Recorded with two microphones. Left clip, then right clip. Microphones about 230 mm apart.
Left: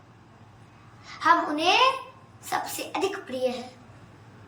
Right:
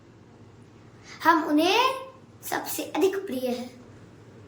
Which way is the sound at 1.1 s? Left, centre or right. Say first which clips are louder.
Even; centre.